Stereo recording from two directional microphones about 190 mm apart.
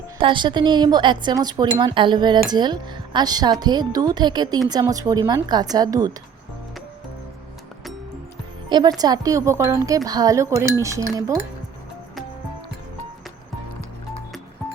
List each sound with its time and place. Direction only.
0.2 s speech: 25° right (ahead or behind)
8.7 s speech: 20° right (ahead or behind)